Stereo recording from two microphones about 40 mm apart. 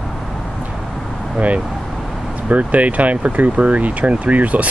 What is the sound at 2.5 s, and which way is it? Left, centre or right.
Speech, right.